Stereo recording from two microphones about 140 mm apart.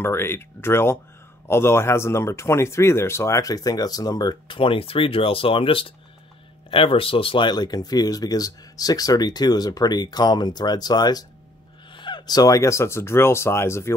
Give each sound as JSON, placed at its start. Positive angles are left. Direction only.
{"t": 0.0, "sound": "speech", "side_deg": 15}